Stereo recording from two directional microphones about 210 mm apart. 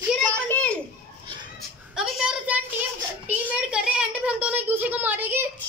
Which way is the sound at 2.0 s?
5° right (ahead or behind).